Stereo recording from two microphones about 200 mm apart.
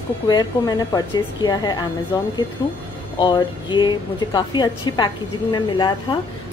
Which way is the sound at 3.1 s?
25° left (ahead or behind).